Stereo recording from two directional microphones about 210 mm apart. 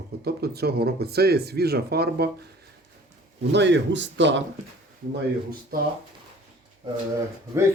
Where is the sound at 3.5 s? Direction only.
55° right (ahead or behind).